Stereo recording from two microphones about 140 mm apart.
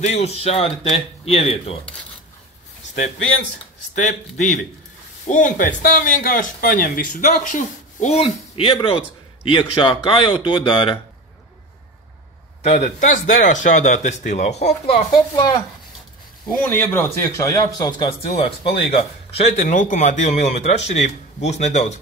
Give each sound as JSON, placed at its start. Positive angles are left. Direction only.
{"t": 0.0, "sound": "speech", "side_deg": 50}
{"t": 3.9, "sound": "a man's voice", "side_deg": 60}
{"t": 12.6, "sound": "speech", "side_deg": 60}
{"t": 16.5, "sound": "a man's voice", "side_deg": 10}
{"t": 18.3, "sound": "speech", "side_deg": 40}
{"t": 19.5, "sound": "speech", "side_deg": 65}